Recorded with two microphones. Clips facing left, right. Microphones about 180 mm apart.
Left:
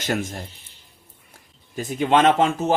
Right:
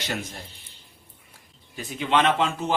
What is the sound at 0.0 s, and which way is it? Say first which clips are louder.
Speech: left 7 dB; 45° left (ahead or behind).